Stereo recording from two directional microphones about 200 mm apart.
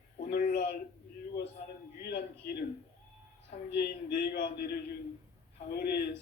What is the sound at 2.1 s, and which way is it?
Speech, 55° left (ahead or behind).